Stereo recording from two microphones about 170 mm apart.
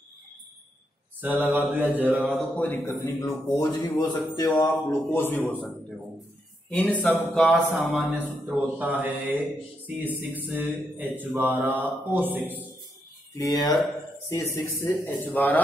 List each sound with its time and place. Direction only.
1.2 s mantra: 10° right (ahead or behind)
2.4 s a man's voice: 10° left (ahead or behind); by 4.6 s 25° left (ahead or behind)
5.1 s a man's voice: 10° left (ahead or behind)
6.7 s a man's voice: 10° left (ahead or behind)
7.8 s mantra: 5° right (ahead or behind)
13.3 s a man's voice: 20° left (ahead or behind)